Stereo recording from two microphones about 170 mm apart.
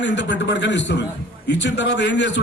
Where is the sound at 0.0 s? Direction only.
90° left.